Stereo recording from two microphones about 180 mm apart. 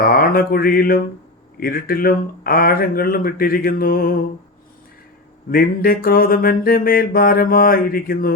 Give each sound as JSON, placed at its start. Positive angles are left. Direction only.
{"t": 0.0, "sound": "mantra", "side_deg": 55}
{"t": 5.5, "sound": "mantra", "side_deg": 55}